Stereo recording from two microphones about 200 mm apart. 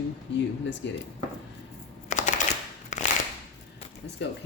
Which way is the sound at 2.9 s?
35° left (ahead or behind).